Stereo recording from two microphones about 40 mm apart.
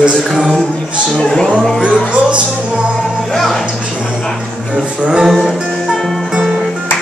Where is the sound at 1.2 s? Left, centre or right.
Centre.